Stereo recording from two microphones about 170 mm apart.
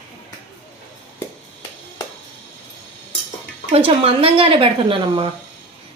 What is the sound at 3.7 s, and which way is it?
Speech, 35° right (ahead or behind).